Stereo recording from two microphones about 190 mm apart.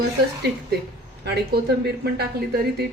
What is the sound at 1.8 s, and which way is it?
A woman's voice, 60° right (ahead or behind).